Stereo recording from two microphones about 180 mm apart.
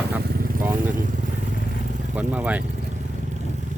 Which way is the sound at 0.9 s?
45° right (ahead or behind).